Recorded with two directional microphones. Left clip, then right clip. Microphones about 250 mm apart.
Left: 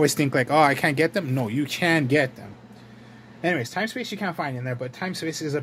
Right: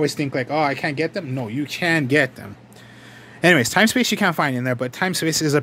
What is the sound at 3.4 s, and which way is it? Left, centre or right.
Speech, right.